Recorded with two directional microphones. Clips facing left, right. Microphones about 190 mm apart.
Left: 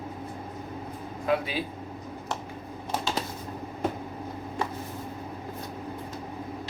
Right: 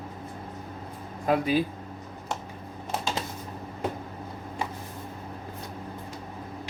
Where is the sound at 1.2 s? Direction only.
45° right (ahead or behind).